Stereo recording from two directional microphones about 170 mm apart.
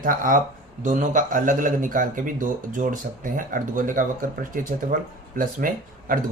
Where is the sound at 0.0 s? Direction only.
55° right (ahead or behind).